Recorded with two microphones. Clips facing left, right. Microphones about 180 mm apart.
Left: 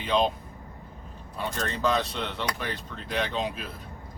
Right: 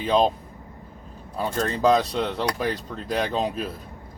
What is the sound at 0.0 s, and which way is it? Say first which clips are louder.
Speech: right 5 dB; 35° right (ahead or behind).